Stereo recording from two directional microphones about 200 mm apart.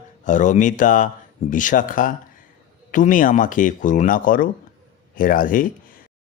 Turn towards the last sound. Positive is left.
turn(degrees=45)  # may be behind; listen again after turning